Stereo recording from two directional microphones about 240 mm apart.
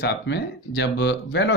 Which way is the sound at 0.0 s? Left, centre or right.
Left.